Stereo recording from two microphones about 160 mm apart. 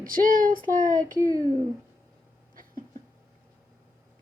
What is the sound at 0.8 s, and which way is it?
Speech, 20° right (ahead or behind).